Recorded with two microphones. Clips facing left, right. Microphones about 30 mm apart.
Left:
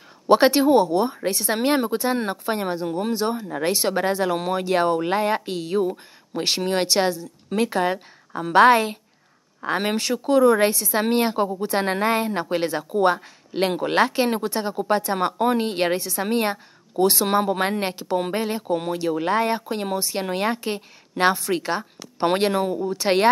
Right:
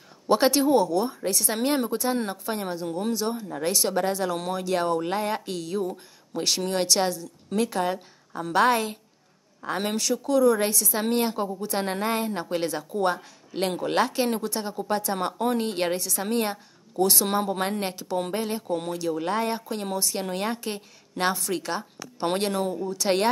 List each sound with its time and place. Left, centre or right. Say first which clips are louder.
0.3 s speech: left 4 dB; left